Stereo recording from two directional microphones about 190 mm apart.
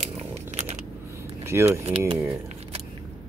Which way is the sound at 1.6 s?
30° right (ahead or behind).